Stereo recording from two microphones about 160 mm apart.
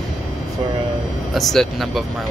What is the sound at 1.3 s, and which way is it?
Speech, centre (ahead or behind).